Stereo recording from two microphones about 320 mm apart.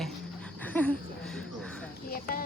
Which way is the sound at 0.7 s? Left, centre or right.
Centre.